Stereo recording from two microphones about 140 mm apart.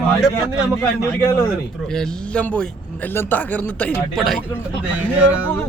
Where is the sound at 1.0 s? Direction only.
20° left (ahead or behind).